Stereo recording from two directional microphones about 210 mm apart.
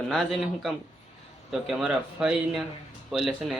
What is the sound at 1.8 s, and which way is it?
Speech, 5° right (ahead or behind).